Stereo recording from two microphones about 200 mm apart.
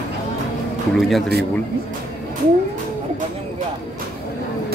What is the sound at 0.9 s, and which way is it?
Speech, centre (ahead or behind).